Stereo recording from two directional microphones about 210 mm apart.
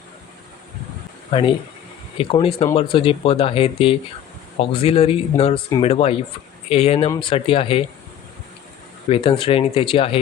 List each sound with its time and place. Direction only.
1.3 s speech: 25° left (ahead or behind)
9.0 s speech: 25° left (ahead or behind)